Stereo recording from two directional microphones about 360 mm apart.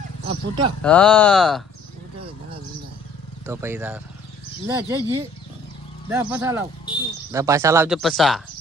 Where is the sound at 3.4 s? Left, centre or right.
Centre.